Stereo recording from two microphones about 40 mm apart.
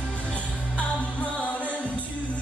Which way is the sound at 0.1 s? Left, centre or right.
Left.